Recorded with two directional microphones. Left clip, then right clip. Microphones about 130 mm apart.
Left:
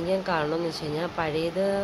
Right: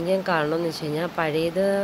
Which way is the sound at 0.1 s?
20° right (ahead or behind).